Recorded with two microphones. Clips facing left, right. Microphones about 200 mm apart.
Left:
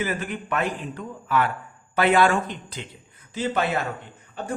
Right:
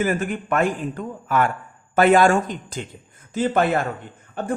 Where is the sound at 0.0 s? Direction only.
50° right (ahead or behind).